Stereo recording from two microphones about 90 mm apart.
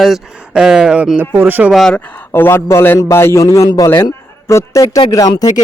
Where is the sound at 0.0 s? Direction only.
5° right (ahead or behind); by 1.7 s 20° right (ahead or behind).